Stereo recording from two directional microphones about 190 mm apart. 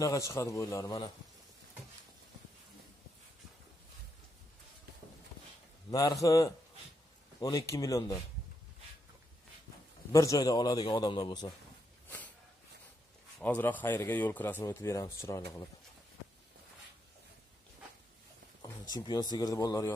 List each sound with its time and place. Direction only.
0.0 s a man's voice: 15° left (ahead or behind)
5.9 s a man's voice: 20° left (ahead or behind)
10.1 s a man's voice: 20° left (ahead or behind)
13.4 s a man's voice: 10° left (ahead or behind)
18.6 s speech: 20° left (ahead or behind)